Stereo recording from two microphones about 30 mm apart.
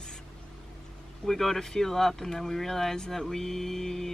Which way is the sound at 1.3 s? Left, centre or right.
Centre.